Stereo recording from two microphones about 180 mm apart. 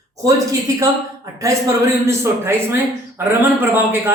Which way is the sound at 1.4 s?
20° right (ahead or behind).